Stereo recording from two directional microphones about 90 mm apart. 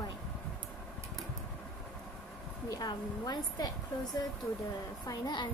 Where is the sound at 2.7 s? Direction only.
50° left (ahead or behind).